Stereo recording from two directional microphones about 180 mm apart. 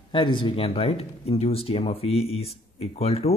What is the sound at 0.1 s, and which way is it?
Speech, 25° left (ahead or behind).